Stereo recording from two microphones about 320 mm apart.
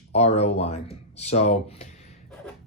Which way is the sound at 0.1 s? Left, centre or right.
Left.